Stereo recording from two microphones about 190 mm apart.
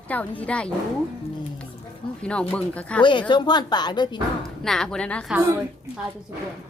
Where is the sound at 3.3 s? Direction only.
20° left (ahead or behind).